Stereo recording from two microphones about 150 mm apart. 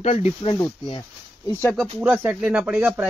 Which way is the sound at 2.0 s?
15° right (ahead or behind).